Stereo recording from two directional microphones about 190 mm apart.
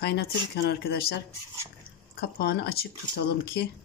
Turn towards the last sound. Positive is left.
turn(degrees=55)  # may be behind; listen again after turning